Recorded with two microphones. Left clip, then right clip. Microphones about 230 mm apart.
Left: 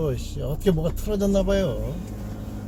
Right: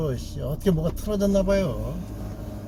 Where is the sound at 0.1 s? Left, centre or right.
Centre.